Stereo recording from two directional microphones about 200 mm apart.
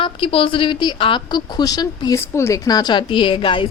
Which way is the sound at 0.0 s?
25° left (ahead or behind).